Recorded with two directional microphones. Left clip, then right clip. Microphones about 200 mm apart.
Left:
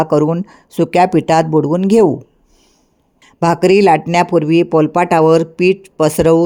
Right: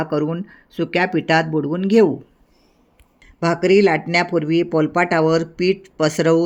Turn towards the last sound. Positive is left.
turn(degrees=25)  # may be behind; listen again after turning